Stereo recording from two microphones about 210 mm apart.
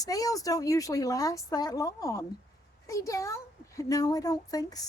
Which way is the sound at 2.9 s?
15° left (ahead or behind).